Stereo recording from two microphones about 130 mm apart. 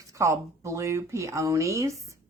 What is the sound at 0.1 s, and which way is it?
A child's voice, 25° right (ahead or behind).